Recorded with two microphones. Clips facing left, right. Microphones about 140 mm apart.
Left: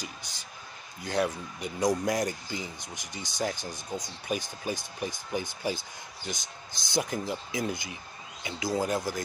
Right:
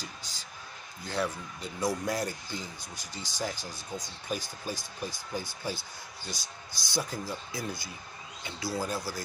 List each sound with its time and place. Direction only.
0.0 s a sound: 15° left (ahead or behind)
1.0 s speech: 60° left (ahead or behind)
1.6 s speech: 15° left (ahead or behind)